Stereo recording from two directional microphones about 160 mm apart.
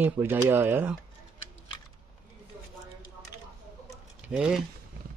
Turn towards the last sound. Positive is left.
turn(degrees=-5)  # may be behind; listen again after turning